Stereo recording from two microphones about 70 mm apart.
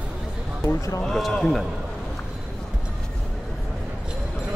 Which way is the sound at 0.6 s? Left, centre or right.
Left.